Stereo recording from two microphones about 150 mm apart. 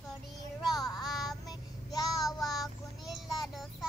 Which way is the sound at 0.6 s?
Centre (ahead or behind).